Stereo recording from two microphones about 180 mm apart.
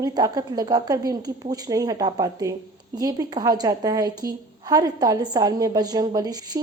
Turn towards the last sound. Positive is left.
turn(degrees=-20)  # may be behind; listen again after turning